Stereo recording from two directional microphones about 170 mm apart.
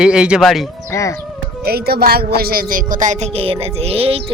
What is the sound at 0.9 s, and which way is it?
Speech, 20° left (ahead or behind).